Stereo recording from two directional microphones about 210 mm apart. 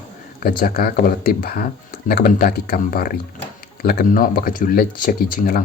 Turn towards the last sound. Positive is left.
turn(degrees=45)  # may be behind; listen again after turning